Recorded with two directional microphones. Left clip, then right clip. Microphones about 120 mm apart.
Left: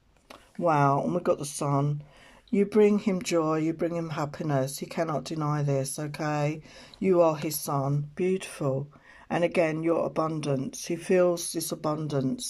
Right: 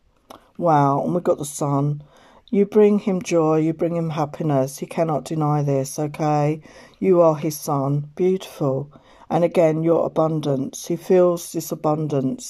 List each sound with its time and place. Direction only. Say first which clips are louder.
0.3 s speech: right 7 dB; 25° right (ahead or behind)